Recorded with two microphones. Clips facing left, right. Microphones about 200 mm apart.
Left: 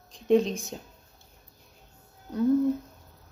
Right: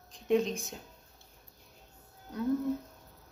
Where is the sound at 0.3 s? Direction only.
35° left (ahead or behind).